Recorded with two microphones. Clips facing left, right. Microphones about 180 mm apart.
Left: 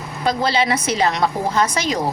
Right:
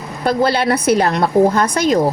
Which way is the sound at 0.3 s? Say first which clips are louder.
Right 4 dB; 55° right (ahead or behind).